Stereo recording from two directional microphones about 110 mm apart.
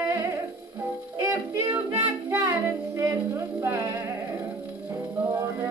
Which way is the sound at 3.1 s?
25° right (ahead or behind).